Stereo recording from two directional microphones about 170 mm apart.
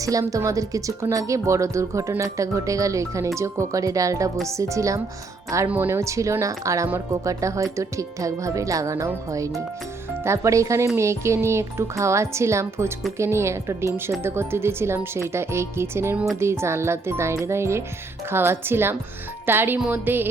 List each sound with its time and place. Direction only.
0.0 s speech: 20° right (ahead or behind)